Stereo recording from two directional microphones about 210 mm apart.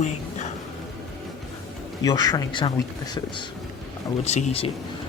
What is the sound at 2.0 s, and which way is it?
Speech, 15° left (ahead or behind).